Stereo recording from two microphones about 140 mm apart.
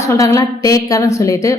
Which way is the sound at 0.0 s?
20° left (ahead or behind).